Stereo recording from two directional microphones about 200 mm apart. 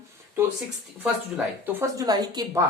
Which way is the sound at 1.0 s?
10° right (ahead or behind).